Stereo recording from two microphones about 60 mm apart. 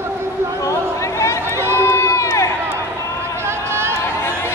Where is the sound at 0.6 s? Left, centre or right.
Left.